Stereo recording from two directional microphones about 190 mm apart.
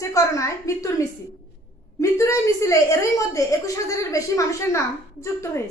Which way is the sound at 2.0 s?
15° left (ahead or behind).